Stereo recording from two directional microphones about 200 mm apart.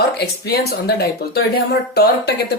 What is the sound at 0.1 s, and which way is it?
Speech, 50° left (ahead or behind).